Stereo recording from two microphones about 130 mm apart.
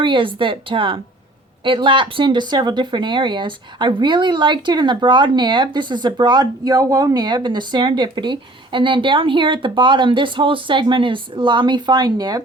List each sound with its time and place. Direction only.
0.0 s speech: 40° right (ahead or behind)